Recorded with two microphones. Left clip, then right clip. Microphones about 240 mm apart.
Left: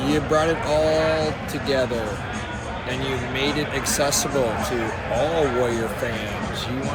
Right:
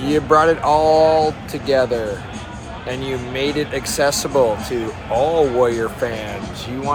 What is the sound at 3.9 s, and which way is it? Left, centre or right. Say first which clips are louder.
Speech: right 4 dB; centre.